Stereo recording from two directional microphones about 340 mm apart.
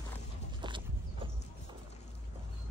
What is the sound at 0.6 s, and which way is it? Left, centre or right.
Horse, centre.